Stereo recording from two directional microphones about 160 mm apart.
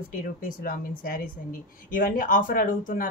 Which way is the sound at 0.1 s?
60° left (ahead or behind).